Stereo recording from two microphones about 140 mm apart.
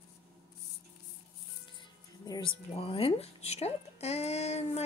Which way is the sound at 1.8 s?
30° left (ahead or behind).